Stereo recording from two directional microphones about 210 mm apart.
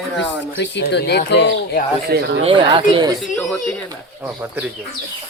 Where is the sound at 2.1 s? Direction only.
50° right (ahead or behind).